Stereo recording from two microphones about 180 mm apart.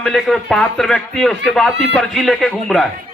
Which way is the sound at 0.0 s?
Centre (ahead or behind).